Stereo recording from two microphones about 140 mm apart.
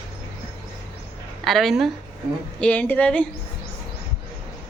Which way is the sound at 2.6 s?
10° left (ahead or behind).